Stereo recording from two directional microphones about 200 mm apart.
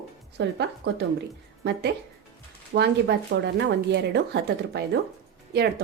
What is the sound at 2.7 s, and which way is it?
Speech, 55° right (ahead or behind).